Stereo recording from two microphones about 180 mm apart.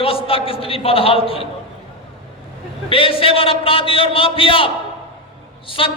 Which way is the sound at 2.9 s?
30° left (ahead or behind).